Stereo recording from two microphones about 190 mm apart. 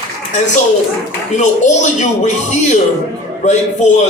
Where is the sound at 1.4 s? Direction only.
40° left (ahead or behind).